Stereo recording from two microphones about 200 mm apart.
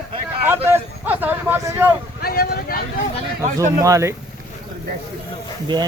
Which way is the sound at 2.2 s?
50° left (ahead or behind).